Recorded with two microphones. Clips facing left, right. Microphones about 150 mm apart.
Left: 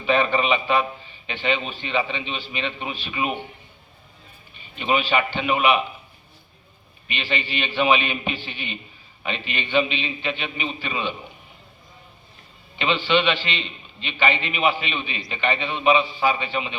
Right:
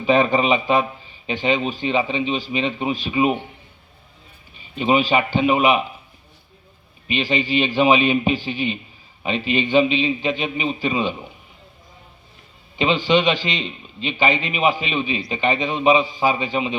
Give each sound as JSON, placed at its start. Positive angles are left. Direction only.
{"t": 0.0, "sound": "a man's voice", "side_deg": -40}
{"t": 4.7, "sound": "a man's voice", "side_deg": -35}
{"t": 7.2, "sound": "a man's voice", "side_deg": -40}
{"t": 12.8, "sound": "a man's voice", "side_deg": -35}